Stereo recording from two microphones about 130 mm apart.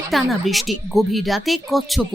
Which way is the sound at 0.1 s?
Centre (ahead or behind).